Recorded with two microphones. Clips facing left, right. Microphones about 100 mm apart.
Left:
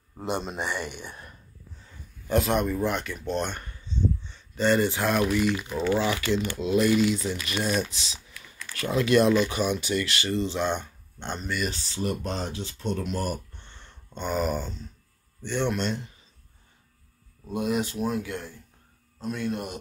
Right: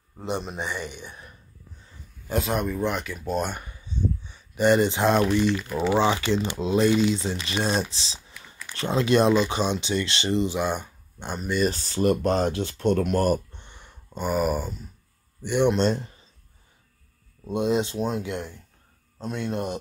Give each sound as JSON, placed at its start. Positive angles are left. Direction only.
{"t": 0.6, "sound": "speech", "side_deg": 10}
{"t": 2.2, "sound": "speech", "side_deg": -5}
{"t": 5.5, "sound": "speech", "side_deg": 5}
{"t": 6.0, "sound": "speech", "side_deg": -25}
{"t": 11.6, "sound": "speech", "side_deg": -50}
{"t": 13.5, "sound": "a sound", "side_deg": -15}
{"t": 15.4, "sound": "speech", "side_deg": -15}
{"t": 15.7, "sound": "speech", "side_deg": -30}
{"t": 17.5, "sound": "speech", "side_deg": -25}